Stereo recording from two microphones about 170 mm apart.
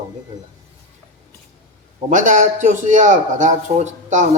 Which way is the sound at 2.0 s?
45° right (ahead or behind).